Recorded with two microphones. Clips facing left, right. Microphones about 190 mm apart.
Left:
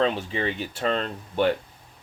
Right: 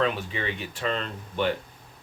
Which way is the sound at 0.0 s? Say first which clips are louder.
Left 3 dB; 35° left (ahead or behind).